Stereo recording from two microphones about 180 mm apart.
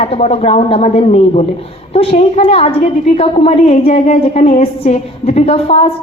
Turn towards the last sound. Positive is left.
turn(degrees=35)  # may be behind; listen again after turning